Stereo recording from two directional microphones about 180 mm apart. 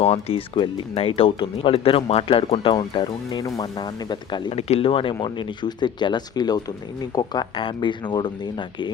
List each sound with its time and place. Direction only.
0.0 s speech: 35° left (ahead or behind)